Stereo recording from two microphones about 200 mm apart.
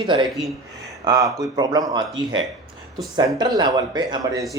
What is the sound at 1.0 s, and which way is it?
Speech, 15° right (ahead or behind).